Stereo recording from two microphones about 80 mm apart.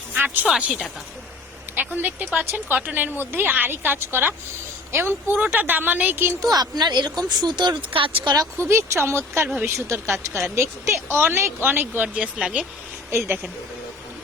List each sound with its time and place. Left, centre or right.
0.1 s music: right
0.4 s speech: centre
1.7 s speech: right
6.4 s a woman's voice: right
8.5 s speech: right; by 12.6 s centre
13.1 s speech: right